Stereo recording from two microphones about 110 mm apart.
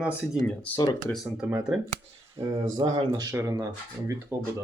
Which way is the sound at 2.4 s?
35° right (ahead or behind).